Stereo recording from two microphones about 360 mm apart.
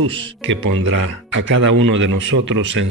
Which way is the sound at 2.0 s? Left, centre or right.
Right.